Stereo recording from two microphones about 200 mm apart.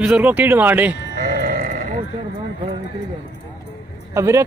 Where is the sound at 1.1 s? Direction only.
45° right (ahead or behind).